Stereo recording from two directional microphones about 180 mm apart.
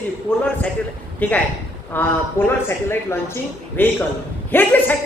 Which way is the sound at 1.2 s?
10° left (ahead or behind).